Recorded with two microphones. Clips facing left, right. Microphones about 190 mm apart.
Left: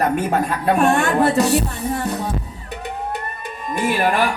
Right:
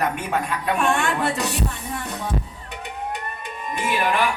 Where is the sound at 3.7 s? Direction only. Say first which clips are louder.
Left 4 dB; 40° left (ahead or behind).